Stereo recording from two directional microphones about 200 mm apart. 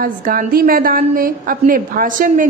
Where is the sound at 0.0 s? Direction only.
45° right (ahead or behind).